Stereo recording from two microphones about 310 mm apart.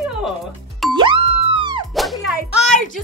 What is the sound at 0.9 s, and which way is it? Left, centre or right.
Music, centre.